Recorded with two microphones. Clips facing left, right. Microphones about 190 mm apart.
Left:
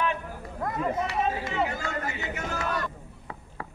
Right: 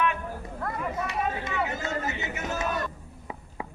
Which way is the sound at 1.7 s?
20° right (ahead or behind).